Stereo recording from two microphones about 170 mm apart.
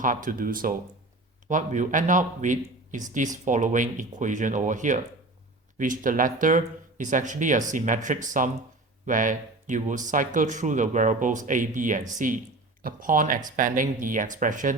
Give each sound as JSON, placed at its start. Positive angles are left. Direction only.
{"t": 0.0, "sound": "a man's voice", "side_deg": -50}